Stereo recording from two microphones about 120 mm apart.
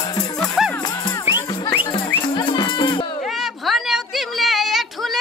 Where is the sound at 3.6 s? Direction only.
Centre (ahead or behind).